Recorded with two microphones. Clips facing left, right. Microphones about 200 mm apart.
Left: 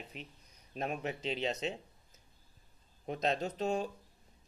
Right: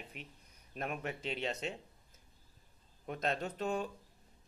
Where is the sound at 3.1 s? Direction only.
30° left (ahead or behind).